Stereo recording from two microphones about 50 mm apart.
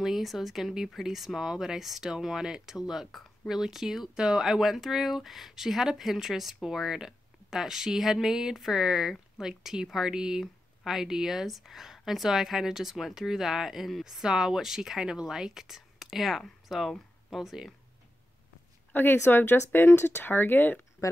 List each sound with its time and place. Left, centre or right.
0.0 s speech: centre
18.9 s speech: left